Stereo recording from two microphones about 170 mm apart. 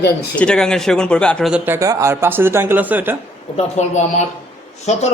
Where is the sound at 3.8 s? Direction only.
40° left (ahead or behind).